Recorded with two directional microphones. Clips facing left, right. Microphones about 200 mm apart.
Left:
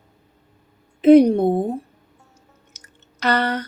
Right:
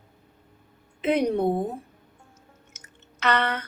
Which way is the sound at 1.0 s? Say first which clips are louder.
Left 11 dB; 35° left (ahead or behind).